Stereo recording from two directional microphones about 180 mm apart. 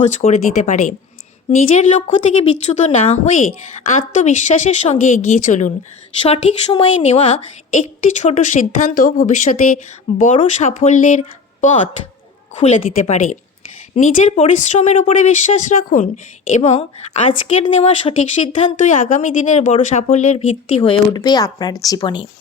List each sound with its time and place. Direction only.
0.1 s speech: 40° left (ahead or behind)